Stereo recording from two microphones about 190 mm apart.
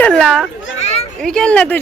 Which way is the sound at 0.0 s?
5° left (ahead or behind).